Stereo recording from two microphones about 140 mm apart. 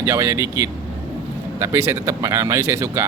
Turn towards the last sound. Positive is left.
turn(degrees=-20)  # may be behind; listen again after turning